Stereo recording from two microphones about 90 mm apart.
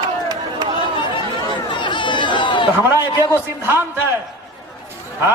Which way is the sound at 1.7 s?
60° left (ahead or behind).